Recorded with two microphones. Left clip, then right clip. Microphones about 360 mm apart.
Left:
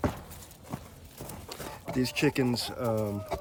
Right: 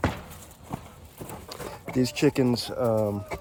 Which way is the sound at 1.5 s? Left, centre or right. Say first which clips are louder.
Right 3 dB; centre.